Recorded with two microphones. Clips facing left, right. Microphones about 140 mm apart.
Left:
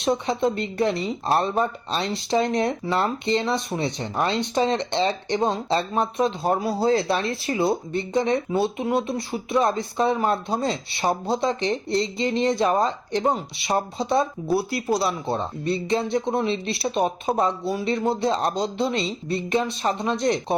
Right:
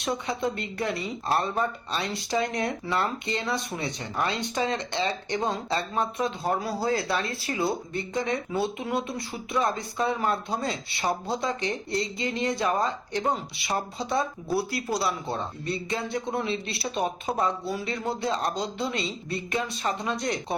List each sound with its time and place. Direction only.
0.0 s speech: 25° left (ahead or behind)